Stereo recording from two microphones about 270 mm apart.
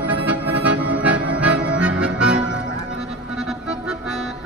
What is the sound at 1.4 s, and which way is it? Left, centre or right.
Accordion, centre.